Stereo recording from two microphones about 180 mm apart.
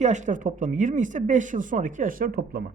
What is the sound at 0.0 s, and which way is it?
A woman's voice, 40° right (ahead or behind).